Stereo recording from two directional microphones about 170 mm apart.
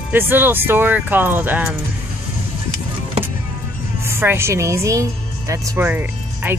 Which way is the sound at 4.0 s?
15° right (ahead or behind).